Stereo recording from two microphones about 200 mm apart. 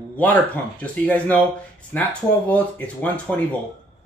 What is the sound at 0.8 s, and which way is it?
Speech, 5° left (ahead or behind).